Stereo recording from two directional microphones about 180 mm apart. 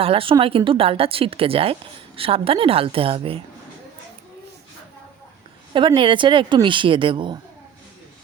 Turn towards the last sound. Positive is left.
turn(degrees=-25)  # may be behind; listen again after turning